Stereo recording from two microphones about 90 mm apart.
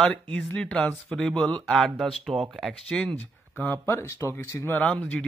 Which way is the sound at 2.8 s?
15° left (ahead or behind).